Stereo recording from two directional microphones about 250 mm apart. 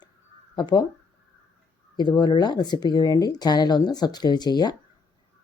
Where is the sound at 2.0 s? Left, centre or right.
Centre.